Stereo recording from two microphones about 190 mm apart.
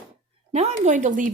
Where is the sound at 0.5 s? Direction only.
35° right (ahead or behind).